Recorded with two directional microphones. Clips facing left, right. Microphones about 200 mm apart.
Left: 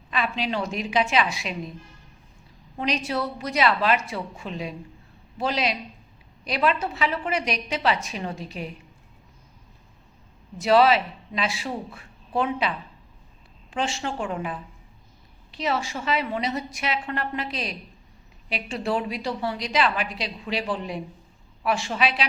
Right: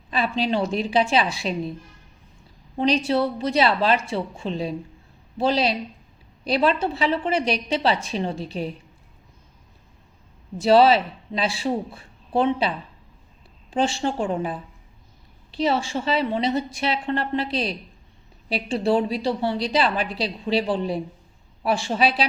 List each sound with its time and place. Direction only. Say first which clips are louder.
0.1 s a woman's voice: right 4 dB; 30° right (ahead or behind)
2.7 s a woman's voice: right 6 dB; 30° right (ahead or behind)
10.6 s a woman's voice: right 3 dB; 30° right (ahead or behind)